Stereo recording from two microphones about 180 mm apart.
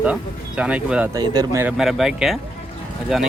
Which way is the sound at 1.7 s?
Centre (ahead or behind).